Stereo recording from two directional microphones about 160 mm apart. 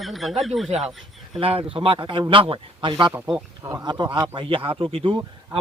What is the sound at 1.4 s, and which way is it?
Speech, 35° right (ahead or behind).